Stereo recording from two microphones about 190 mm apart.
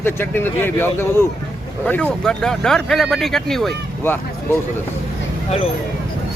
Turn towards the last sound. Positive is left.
turn(degrees=35)  # may be behind; listen again after turning